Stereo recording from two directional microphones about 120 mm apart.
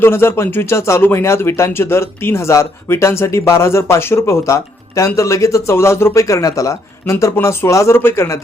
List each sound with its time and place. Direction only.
0.0 s speech: 20° left (ahead or behind)